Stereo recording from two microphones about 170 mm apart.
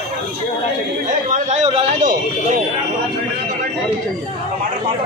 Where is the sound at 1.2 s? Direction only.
50° right (ahead or behind).